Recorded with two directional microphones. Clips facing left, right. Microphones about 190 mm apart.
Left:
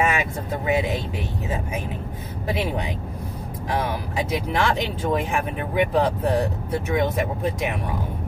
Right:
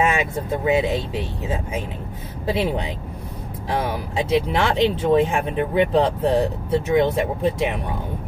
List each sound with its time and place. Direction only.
0.7 s speech: 25° right (ahead or behind)
4.3 s speech: 25° right (ahead or behind)